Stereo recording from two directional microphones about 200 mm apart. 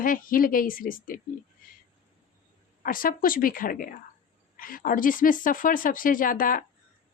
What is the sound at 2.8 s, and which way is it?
A woman's voice, 45° left (ahead or behind).